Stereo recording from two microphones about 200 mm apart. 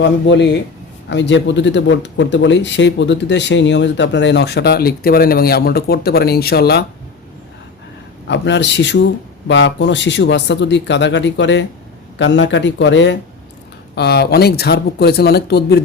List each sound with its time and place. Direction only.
0.0 s speech: 60° left (ahead or behind)
8.3 s speech: 60° left (ahead or behind)